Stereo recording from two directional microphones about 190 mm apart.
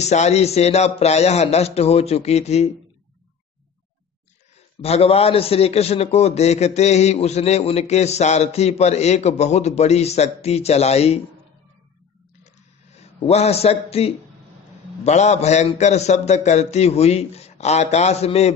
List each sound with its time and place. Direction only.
0.0 s a man's voice: 35° left (ahead or behind)
4.8 s a man's voice: 30° left (ahead or behind)
12.9 s a man's voice: 35° left (ahead or behind)